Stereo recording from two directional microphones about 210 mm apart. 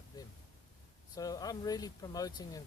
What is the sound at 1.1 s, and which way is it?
Speech, 15° left (ahead or behind).